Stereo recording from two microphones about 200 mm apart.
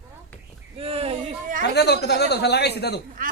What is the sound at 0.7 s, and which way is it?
Speech, 30° right (ahead or behind).